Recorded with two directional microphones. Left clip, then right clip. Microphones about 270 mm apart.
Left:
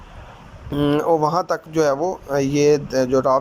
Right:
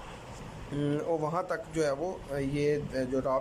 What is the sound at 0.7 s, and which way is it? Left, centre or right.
Speech, centre.